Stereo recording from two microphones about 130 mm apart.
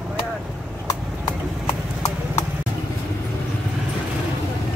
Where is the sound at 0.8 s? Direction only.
25° left (ahead or behind).